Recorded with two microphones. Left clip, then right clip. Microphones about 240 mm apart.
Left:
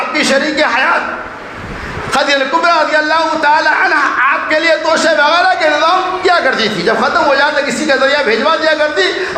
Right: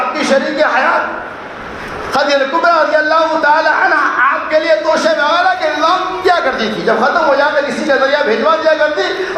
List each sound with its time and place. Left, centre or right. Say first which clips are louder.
0.2 s speech: left 2 dB; left
2.1 s a sound: left 1 dB; left
7.9 s speech: left 1 dB; left